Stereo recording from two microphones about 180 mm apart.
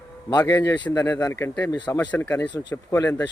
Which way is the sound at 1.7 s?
25° left (ahead or behind).